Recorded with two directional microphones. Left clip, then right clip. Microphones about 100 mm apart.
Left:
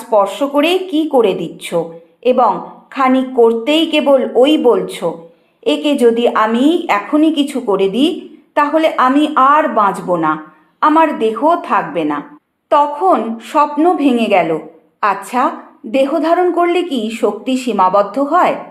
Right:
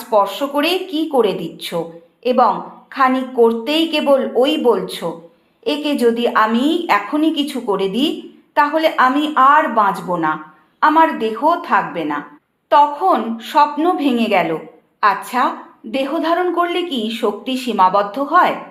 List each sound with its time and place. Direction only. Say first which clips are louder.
0.1 s a woman's voice: left 3 dB; 35° left (ahead or behind)